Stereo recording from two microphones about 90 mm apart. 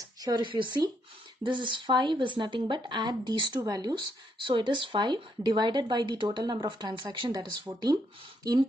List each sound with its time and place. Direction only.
0.0 s a sound: 45° right (ahead or behind)
0.5 s speech: 65° right (ahead or behind); by 4.0 s 50° right (ahead or behind)
4.5 s speech: 65° right (ahead or behind)
7.7 s speech: 50° right (ahead or behind)